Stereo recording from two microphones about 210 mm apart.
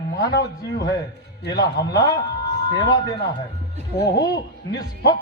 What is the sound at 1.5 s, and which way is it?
A man's voice, 15° left (ahead or behind).